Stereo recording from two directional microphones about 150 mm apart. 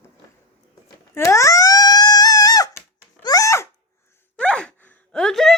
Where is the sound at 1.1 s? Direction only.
20° left (ahead or behind).